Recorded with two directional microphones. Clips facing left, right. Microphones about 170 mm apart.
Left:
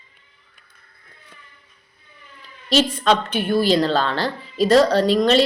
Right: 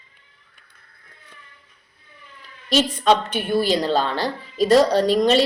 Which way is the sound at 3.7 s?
15° right (ahead or behind).